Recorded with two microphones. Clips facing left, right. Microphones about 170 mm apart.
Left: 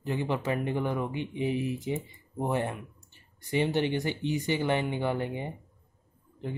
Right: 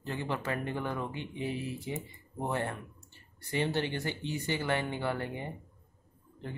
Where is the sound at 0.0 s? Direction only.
15° left (ahead or behind).